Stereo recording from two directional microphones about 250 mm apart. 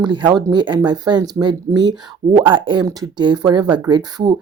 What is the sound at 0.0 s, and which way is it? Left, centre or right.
Speech, centre.